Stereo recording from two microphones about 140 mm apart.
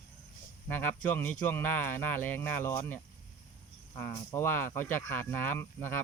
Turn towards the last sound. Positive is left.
turn(degrees=15)  # may be behind; listen again after turning